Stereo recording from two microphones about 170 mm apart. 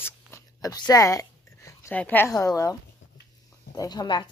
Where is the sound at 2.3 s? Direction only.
20° left (ahead or behind).